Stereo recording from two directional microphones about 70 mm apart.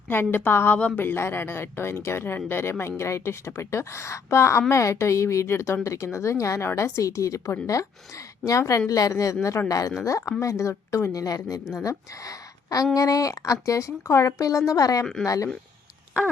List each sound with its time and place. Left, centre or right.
0.1 s speech: left
0.8 s speech: centre
1.0 s a woman's voice: left
15.0 s speech: centre